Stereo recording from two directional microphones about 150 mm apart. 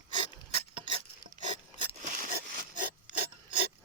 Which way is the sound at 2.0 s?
60° right (ahead or behind).